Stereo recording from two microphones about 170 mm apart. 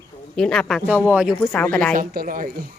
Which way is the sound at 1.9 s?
55° right (ahead or behind).